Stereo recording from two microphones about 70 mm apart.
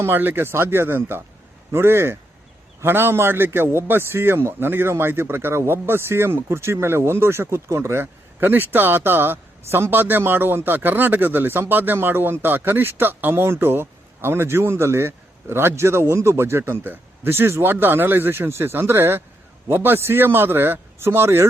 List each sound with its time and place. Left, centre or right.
0.0 s speech: right